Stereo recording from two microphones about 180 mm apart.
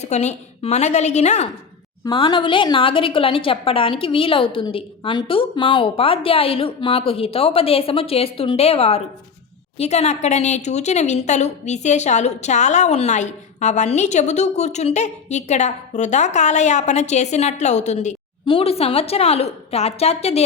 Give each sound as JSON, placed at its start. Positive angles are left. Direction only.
{"t": 0.0, "sound": "a woman's voice", "side_deg": 40}
{"t": 2.0, "sound": "a woman's voice", "side_deg": 25}